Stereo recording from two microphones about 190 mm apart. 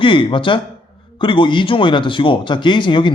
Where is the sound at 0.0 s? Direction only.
25° left (ahead or behind).